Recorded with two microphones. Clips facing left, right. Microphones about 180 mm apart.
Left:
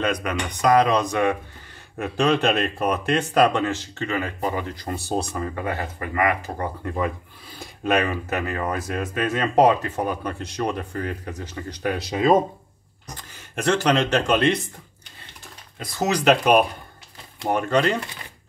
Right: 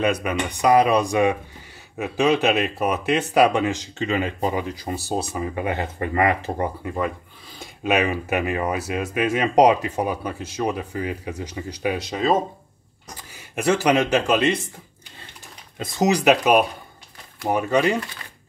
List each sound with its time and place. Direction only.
0.0 s speech: 10° right (ahead or behind)
5.5 s speech: 20° right (ahead or behind)
6.8 s speech: 5° right (ahead or behind)
13.3 s speech: 10° right (ahead or behind)
15.8 s speech: 20° right (ahead or behind)